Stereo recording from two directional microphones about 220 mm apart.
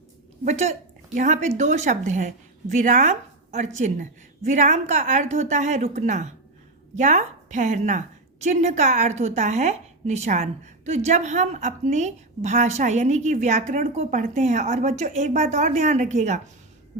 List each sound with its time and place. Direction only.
0.4 s a woman's voice: 30° right (ahead or behind)